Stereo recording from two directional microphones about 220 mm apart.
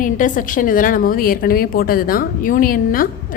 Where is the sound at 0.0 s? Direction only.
35° left (ahead or behind).